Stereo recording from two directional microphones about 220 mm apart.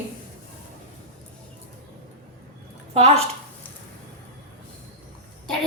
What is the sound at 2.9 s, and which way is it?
Speech, 30° right (ahead or behind).